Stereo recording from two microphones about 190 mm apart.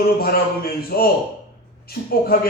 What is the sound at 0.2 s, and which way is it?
A man's voice, 55° left (ahead or behind).